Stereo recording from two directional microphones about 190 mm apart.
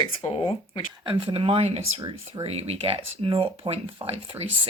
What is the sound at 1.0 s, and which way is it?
Speech, 25° right (ahead or behind).